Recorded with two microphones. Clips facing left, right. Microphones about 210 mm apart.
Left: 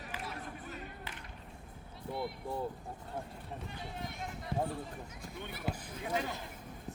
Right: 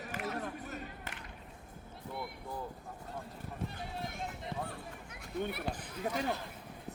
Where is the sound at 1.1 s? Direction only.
45° right (ahead or behind).